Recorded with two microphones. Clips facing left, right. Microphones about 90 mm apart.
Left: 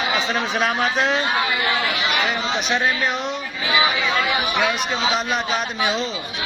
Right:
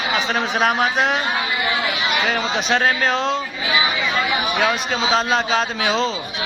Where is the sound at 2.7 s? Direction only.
85° right.